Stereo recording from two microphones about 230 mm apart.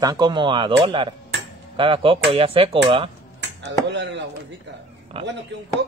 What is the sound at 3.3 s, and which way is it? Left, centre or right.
Speech, right.